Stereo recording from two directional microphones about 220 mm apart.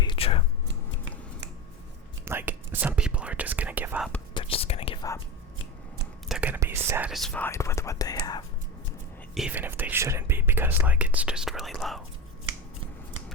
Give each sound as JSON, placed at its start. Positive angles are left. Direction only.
{"t": 0.0, "sound": "whispering", "side_deg": 25}
{"t": 2.2, "sound": "whispering", "side_deg": -10}
{"t": 4.4, "sound": "whispering", "side_deg": 25}
{"t": 6.2, "sound": "whispering", "side_deg": -5}
{"t": 9.3, "sound": "whispering", "side_deg": -5}